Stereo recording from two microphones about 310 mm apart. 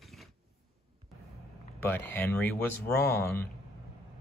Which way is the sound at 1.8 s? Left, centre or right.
Centre.